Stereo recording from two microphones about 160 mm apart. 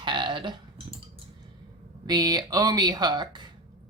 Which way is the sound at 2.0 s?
25° right (ahead or behind).